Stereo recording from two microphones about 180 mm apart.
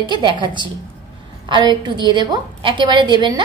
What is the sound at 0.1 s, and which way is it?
A woman's voice, 25° right (ahead or behind).